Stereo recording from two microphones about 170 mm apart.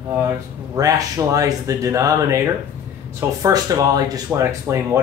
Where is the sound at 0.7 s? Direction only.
20° right (ahead or behind).